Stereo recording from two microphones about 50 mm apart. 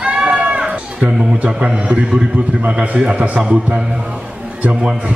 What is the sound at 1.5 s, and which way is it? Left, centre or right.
A man's voice, right.